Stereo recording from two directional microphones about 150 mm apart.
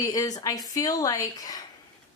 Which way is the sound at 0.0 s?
25° left (ahead or behind).